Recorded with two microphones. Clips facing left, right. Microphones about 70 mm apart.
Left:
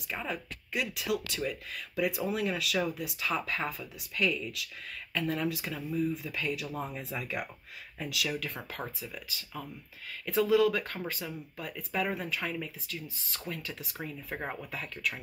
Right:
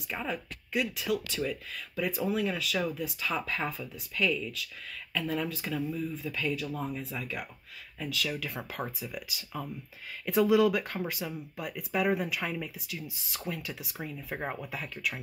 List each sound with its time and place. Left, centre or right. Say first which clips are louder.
0.1 s speech: right 1 dB; centre
6.8 s speech: right 1 dB; left
8.0 s speech: even; centre
8.4 s speech: right 2 dB; centre